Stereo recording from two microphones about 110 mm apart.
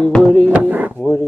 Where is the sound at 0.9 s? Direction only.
15° left (ahead or behind).